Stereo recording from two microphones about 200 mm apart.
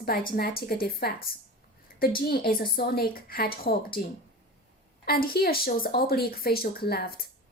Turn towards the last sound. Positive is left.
turn(degrees=50)  # may be behind; listen again after turning